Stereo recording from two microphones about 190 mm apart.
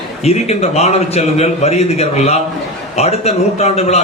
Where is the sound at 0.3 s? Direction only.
35° left (ahead or behind).